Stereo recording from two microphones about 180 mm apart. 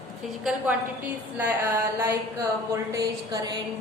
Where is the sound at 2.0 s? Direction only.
15° right (ahead or behind).